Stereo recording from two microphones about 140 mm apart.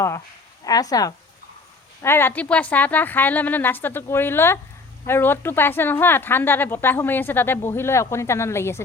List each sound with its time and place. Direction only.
0.6 s a woman's voice: 25° left (ahead or behind)